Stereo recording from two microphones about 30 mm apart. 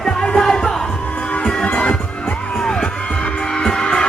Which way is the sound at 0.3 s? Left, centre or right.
Left.